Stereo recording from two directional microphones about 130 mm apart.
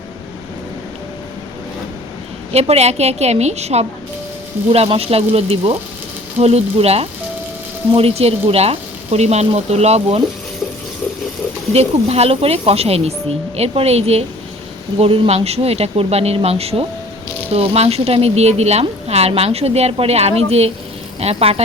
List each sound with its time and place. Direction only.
2.5 s a woman's voice: 55° right (ahead or behind)
11.7 s speech: 55° right (ahead or behind)